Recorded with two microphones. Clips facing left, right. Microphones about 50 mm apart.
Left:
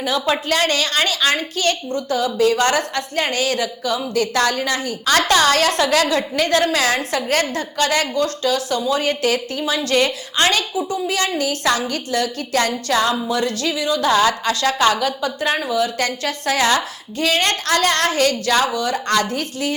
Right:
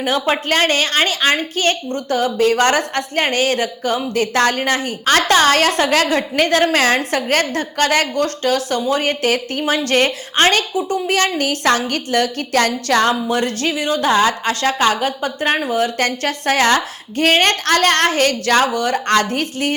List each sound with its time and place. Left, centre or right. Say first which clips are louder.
0.0 s a woman's voice: right 2 dB; right
14.1 s a woman's voice: right 1 dB; right